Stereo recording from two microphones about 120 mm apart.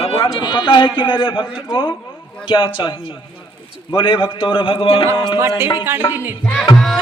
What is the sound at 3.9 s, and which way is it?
A man's voice, 45° left (ahead or behind).